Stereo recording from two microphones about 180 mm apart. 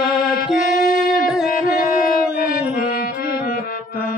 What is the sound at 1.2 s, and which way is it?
Music, centre (ahead or behind).